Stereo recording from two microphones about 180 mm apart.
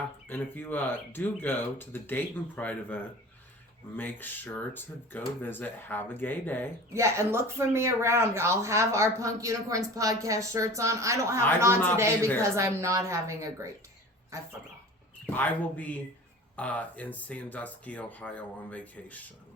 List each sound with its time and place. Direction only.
0.3 s speech: 10° left (ahead or behind)
6.9 s speech: 15° right (ahead or behind)
15.3 s speech: 10° left (ahead or behind)